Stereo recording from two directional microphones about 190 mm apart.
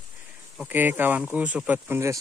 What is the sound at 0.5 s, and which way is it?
Speech, 10° right (ahead or behind).